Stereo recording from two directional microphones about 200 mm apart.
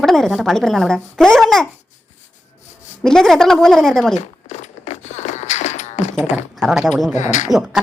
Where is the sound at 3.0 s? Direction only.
Centre (ahead or behind).